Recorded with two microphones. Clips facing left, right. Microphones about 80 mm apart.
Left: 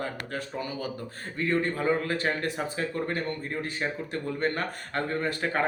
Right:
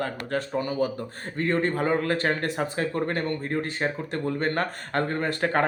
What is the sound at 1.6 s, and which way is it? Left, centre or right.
Speech, right.